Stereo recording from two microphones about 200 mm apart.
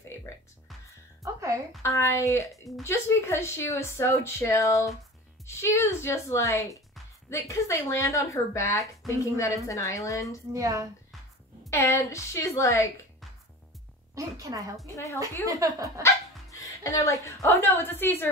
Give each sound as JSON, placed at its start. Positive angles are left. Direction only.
{"t": 1.2, "sound": "music", "side_deg": -15}
{"t": 1.8, "sound": "speech", "side_deg": 15}
{"t": 10.5, "sound": "a woman's voice", "side_deg": -15}
{"t": 11.7, "sound": "speech", "side_deg": 15}
{"t": 14.1, "sound": "a woman's voice", "side_deg": -15}
{"t": 16.0, "sound": "speech", "side_deg": 15}